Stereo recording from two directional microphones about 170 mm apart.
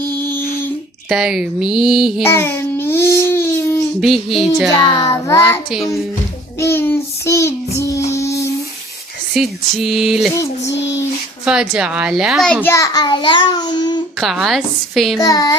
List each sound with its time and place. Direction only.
1.1 s a woman's voice: 5° right (ahead or behind)
2.2 s babbling: 15° left (ahead or behind)
4.0 s a woman's voice: centre (ahead or behind)
4.9 s child singing: 15° left (ahead or behind)
6.6 s child singing: 15° left (ahead or behind)
8.1 s a sound: 15° left (ahead or behind)
9.3 s a woman's voice: centre (ahead or behind)
10.3 s a child's voice: 20° left (ahead or behind)
11.4 s a woman's voice: 5° right (ahead or behind)
12.6 s a child's voice: 20° left (ahead or behind)
14.2 s a woman's voice: centre (ahead or behind)
15.2 s a child's voice: 20° left (ahead or behind)